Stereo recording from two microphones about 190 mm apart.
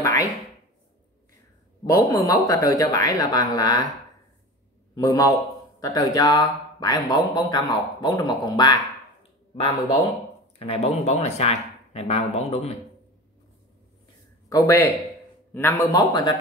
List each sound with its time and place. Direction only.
0.0 s a sound: 15° left (ahead or behind)
1.9 s speech: 15° left (ahead or behind)
4.9 s speech: 20° left (ahead or behind)
10.6 s speech: 35° left (ahead or behind)
14.5 s speech: 15° left (ahead or behind)